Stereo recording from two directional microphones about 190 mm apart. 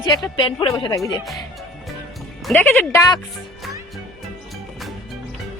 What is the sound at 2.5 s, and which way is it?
Speech, 10° left (ahead or behind).